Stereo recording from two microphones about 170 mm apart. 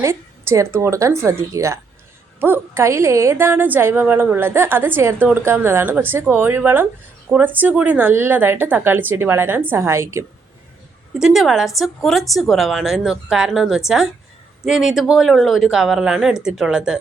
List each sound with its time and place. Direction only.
0.0 s speech: 15° right (ahead or behind)
11.2 s speech: centre (ahead or behind)